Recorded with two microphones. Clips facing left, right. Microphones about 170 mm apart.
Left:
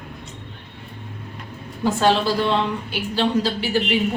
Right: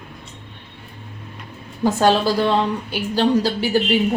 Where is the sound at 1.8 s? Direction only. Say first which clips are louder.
Right 2 dB; 40° right (ahead or behind).